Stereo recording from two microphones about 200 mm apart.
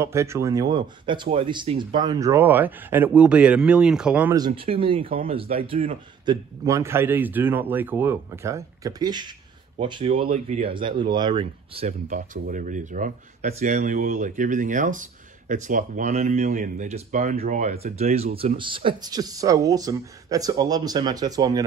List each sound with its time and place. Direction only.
0.0 s speech: 15° right (ahead or behind)
4.4 s speech: 25° right (ahead or behind)
6.2 s speech: 15° right (ahead or behind)
12.1 s speech: 40° right (ahead or behind); by 21.6 s 15° right (ahead or behind)